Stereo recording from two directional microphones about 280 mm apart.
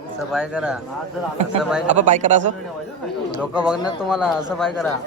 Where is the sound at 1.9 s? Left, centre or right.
Right.